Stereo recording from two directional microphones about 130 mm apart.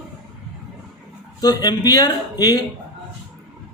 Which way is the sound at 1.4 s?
30° left (ahead or behind).